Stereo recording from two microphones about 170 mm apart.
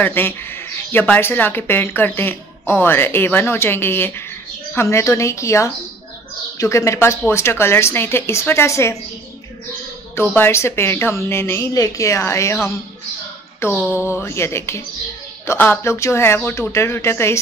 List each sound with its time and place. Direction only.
0.0 s speech: 10° left (ahead or behind)
10.1 s speech: 10° left (ahead or behind)
13.6 s a sound: 15° left (ahead or behind)
13.9 s speech: 15° left (ahead or behind)